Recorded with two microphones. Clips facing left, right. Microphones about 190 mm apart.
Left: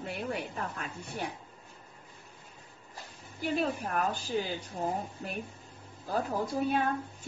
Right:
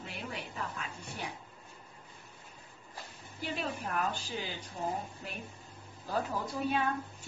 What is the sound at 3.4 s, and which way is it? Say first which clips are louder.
A woman's voice: left 6 dB; 45° left (ahead or behind).